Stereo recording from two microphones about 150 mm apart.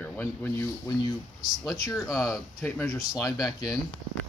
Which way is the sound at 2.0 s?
5° right (ahead or behind).